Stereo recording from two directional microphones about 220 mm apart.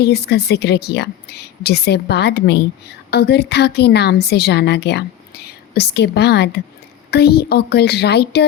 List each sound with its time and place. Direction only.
0.0 s a woman's voice: 50° left (ahead or behind)